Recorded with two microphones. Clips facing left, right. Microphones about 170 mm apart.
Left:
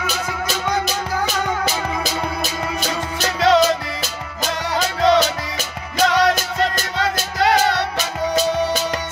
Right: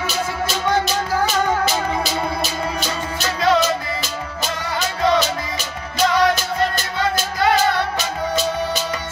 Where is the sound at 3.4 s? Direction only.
80° left.